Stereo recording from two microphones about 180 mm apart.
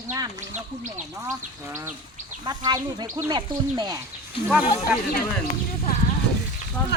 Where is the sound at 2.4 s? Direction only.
25° right (ahead or behind).